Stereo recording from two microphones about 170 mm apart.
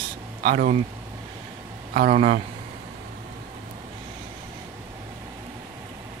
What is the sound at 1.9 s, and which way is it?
Speech, 50° right (ahead or behind).